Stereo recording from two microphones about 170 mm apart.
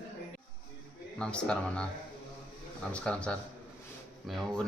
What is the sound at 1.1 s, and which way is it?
Speech, 5° left (ahead or behind).